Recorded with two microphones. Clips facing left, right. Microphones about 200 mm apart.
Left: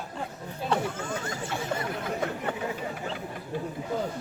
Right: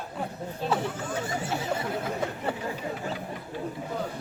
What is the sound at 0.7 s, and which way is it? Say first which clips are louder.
Speech: left 1 dB; 5° right (ahead or behind).